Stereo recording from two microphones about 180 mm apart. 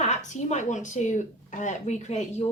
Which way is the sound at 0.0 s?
40° left (ahead or behind).